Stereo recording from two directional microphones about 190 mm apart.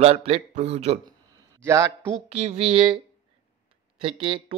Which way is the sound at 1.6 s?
15° right (ahead or behind).